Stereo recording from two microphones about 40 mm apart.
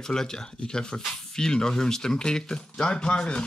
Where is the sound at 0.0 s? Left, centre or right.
Centre.